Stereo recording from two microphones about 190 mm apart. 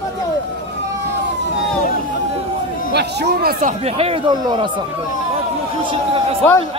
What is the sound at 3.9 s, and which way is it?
Speech, 25° right (ahead or behind).